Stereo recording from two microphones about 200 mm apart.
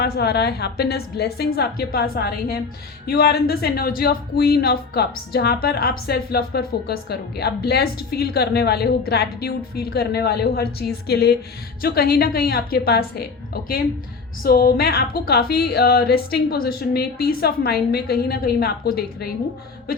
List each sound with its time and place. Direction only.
0.0 s speech: 55° left (ahead or behind)